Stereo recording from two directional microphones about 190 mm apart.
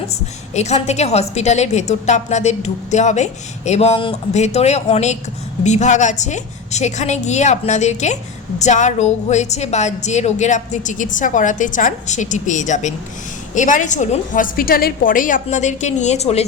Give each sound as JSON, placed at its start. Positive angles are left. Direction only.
{"t": 0.5, "sound": "a woman's voice", "side_deg": 35}